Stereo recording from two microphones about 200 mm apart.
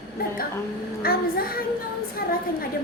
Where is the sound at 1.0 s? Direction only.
45° left (ahead or behind).